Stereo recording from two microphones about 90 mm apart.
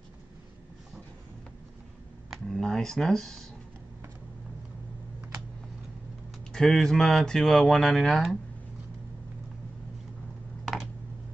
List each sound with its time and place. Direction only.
2.3 s computer keyboard: 5° left (ahead or behind)
6.5 s speech: 5° left (ahead or behind)
10.6 s a sound: centre (ahead or behind)